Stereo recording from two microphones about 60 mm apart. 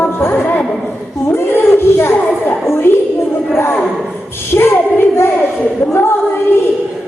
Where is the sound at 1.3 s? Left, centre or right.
Left.